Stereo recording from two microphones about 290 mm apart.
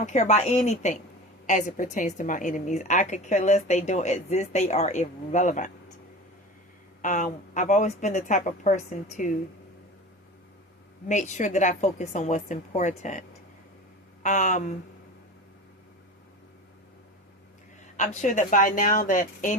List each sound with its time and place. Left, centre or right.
0.0 s a woman's voice: left
7.0 s a woman's voice: left
11.1 s a woman's voice: left
17.9 s a woman's voice: left